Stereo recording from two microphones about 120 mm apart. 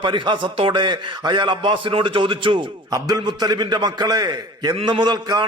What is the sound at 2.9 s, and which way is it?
Mantra, 35° right (ahead or behind).